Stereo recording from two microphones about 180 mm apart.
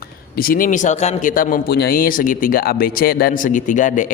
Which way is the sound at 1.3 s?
50° left (ahead or behind).